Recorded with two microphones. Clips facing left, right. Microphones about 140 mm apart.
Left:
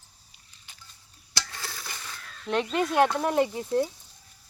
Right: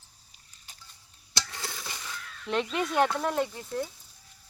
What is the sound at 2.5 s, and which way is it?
Speech, centre (ahead or behind).